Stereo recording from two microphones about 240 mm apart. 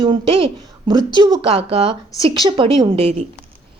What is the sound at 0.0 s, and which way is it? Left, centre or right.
A woman's voice, right.